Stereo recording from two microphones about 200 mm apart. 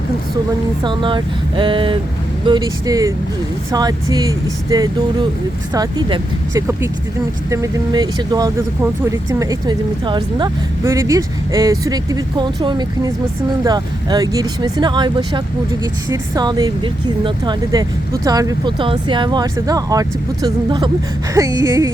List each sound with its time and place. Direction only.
0.9 s speech: 25° right (ahead or behind)